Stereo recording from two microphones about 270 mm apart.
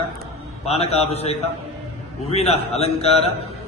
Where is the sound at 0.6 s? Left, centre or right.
Left.